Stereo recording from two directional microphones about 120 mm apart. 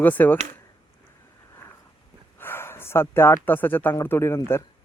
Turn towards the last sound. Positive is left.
turn(degrees=20)  # may be behind; listen again after turning